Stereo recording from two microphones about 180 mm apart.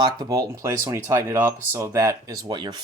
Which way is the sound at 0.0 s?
20° right (ahead or behind).